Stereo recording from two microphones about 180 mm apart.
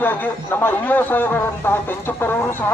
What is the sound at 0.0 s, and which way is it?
A man's voice, 10° left (ahead or behind).